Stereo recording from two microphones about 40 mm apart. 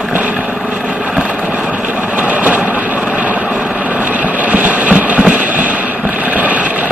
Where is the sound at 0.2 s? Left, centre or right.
Right.